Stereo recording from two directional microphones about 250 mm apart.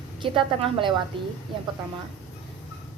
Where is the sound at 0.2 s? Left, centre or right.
Centre.